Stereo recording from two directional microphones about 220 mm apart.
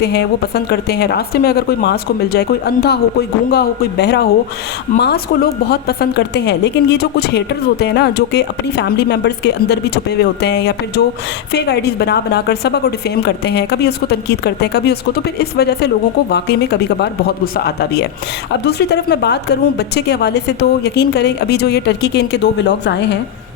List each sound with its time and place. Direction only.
0.0 s a woman's voice: 50° left (ahead or behind)
17.0 s a woman's voice: 45° left (ahead or behind)